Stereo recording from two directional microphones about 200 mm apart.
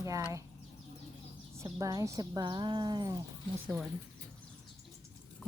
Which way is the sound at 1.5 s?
15° right (ahead or behind).